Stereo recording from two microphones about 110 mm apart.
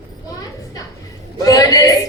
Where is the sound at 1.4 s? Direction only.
30° left (ahead or behind).